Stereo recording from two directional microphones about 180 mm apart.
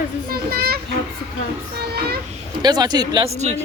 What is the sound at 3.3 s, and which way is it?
Speech, 40° right (ahead or behind).